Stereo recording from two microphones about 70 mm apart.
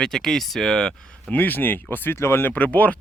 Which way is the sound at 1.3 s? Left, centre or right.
Left.